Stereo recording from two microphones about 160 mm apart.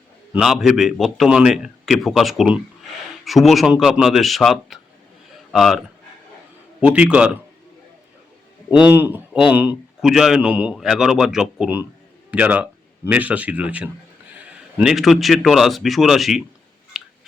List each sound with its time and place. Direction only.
0.3 s a man's voice: centre (ahead or behind)
6.8 s speech: 10° right (ahead or behind)
8.7 s a man's voice: 10° right (ahead or behind)
16.9 s a sound: centre (ahead or behind)